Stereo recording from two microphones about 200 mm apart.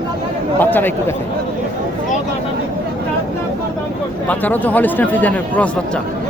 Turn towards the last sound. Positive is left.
turn(degrees=5)  # may be behind; listen again after turning